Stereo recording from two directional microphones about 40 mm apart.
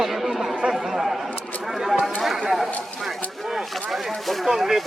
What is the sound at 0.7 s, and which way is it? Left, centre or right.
Chatter, centre.